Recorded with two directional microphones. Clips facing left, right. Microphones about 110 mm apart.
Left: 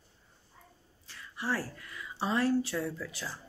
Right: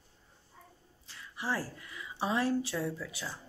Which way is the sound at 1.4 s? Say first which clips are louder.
Left 1 dB; 20° right (ahead or behind).